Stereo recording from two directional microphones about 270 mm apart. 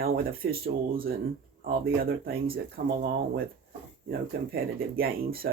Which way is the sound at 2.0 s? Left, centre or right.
Right.